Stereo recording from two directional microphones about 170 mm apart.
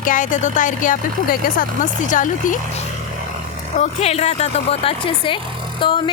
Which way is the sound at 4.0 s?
40° left (ahead or behind).